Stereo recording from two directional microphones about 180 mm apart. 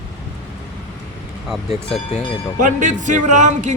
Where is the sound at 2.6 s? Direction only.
45° right (ahead or behind).